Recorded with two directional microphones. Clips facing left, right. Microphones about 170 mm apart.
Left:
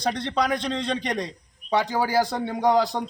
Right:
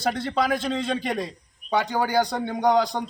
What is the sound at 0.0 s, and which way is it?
A man's voice, 5° right (ahead or behind).